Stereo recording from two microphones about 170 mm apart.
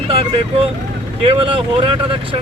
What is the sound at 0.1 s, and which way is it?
Speech, 35° right (ahead or behind).